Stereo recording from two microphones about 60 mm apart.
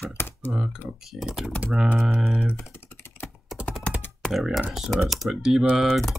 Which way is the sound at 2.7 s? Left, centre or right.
Left.